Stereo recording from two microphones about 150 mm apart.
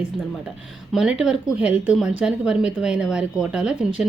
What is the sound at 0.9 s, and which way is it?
Speech, 5° right (ahead or behind).